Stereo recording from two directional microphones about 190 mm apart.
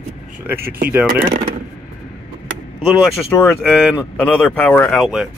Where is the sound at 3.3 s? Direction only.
10° left (ahead or behind).